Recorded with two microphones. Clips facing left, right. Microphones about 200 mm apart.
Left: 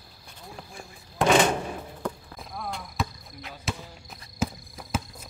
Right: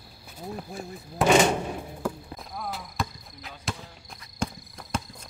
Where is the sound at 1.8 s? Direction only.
10° right (ahead or behind).